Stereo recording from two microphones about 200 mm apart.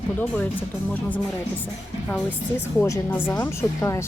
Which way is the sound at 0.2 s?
10° left (ahead or behind).